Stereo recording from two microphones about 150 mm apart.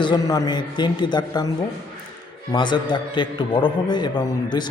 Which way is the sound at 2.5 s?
30° left (ahead or behind).